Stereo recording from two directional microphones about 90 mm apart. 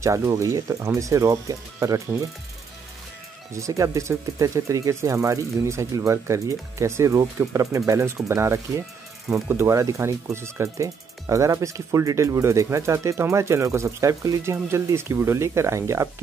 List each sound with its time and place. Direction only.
0.0 s speech: 35° right (ahead or behind)
3.5 s speech: 35° right (ahead or behind)